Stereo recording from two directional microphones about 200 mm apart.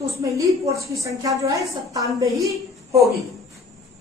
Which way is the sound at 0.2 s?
15° right (ahead or behind).